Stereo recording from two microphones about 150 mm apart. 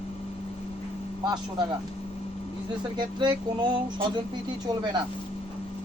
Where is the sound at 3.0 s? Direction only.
30° right (ahead or behind).